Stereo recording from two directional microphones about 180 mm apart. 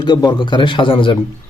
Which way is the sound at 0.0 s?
25° left (ahead or behind).